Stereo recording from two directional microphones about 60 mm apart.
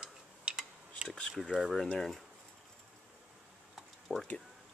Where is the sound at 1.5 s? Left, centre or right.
Centre.